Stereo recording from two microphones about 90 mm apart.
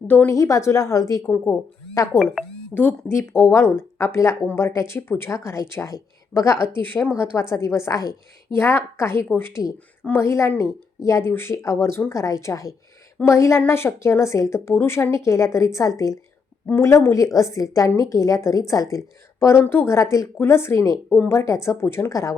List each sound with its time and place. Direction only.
0.3 s speech: 35° left (ahead or behind)
2.7 s speech: 5° left (ahead or behind)
3.1 s a woman's voice: 25° left (ahead or behind)
7.5 s speech: 30° left (ahead or behind)
8.5 s a woman's voice: 25° left (ahead or behind)